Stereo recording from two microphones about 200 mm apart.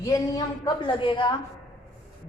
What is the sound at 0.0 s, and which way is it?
A woman's voice, 20° left (ahead or behind).